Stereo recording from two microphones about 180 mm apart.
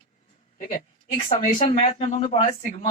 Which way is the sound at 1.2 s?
45° left (ahead or behind).